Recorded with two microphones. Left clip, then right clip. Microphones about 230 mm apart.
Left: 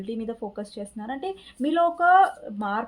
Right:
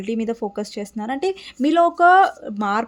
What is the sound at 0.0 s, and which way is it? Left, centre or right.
Speech, right.